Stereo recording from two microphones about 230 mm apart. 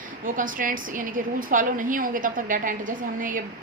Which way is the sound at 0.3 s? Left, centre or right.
Right.